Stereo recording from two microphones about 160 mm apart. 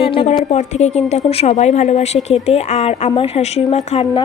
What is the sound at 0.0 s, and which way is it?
A woman's voice, 35° left (ahead or behind).